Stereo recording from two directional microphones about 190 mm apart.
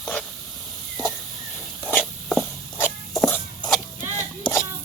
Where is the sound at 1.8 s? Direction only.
5° left (ahead or behind).